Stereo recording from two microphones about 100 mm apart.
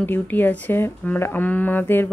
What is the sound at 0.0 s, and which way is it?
Speech, 20° left (ahead or behind).